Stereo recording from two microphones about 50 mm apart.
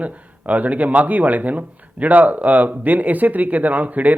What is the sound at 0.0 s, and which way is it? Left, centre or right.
Speech, right.